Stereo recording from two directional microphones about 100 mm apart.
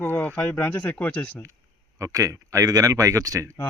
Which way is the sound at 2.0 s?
35° right (ahead or behind).